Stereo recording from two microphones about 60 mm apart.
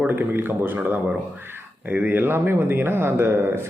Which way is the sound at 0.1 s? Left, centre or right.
Right.